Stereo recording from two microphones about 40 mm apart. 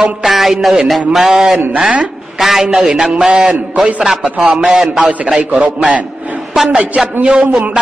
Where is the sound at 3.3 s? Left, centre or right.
Right.